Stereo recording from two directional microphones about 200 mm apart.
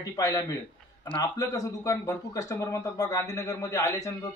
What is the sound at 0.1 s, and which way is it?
Speech, 15° left (ahead or behind).